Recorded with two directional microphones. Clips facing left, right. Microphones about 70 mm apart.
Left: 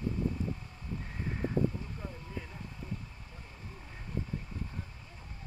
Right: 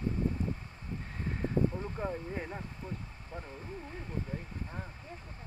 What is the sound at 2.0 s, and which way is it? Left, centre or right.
Speech, right.